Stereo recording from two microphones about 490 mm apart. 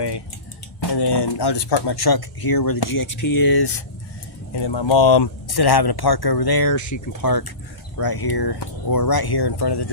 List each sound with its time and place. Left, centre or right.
0.8 s speech: left